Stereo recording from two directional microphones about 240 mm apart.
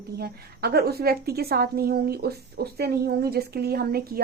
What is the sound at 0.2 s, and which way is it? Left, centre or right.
A woman's voice, right.